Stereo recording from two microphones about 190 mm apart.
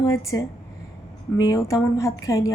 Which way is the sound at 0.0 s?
15° left (ahead or behind).